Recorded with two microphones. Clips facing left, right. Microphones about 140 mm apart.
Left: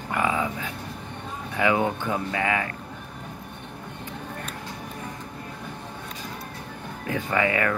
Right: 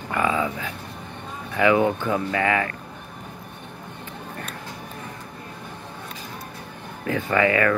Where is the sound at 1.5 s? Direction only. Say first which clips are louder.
Right 4 dB; 20° left (ahead or behind).